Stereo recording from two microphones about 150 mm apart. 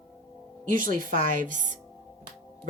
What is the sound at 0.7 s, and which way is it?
A woman's voice, 65° right (ahead or behind).